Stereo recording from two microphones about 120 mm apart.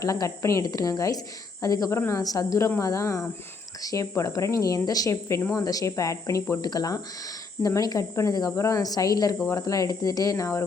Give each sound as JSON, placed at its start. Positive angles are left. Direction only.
{"t": 0.0, "sound": "speech", "side_deg": 30}